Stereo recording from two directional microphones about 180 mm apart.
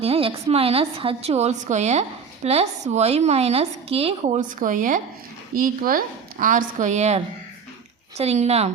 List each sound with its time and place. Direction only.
0.0 s a woman's voice: 30° right (ahead or behind)
4.4 s a woman's voice: 45° right (ahead or behind)
8.2 s a woman's voice: 35° right (ahead or behind)